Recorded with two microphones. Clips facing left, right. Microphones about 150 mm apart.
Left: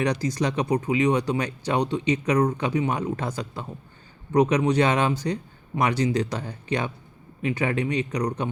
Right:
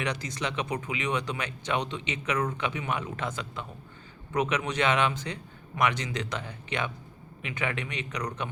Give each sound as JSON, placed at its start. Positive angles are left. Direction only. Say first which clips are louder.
{"t": 0.0, "sound": "speech", "louder": "left 8 dB", "side_deg": 35}